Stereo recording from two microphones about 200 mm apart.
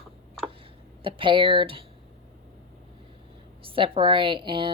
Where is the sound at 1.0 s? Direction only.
25° right (ahead or behind).